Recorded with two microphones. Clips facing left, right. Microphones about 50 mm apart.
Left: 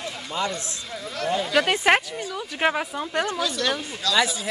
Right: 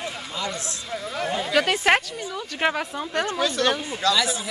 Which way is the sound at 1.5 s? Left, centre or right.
Centre.